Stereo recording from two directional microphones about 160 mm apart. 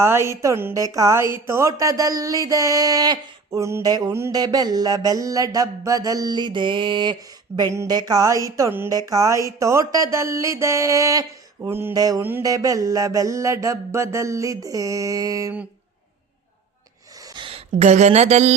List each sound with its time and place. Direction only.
0.0 s a woman's voice: 15° right (ahead or behind)
17.3 s speech: 35° right (ahead or behind)